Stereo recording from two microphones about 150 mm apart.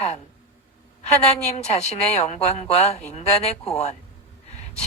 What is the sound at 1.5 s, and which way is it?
A woman's voice, 45° left (ahead or behind).